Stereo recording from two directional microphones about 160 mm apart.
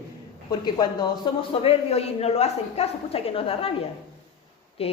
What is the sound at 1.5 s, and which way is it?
A woman's voice, 35° left (ahead or behind).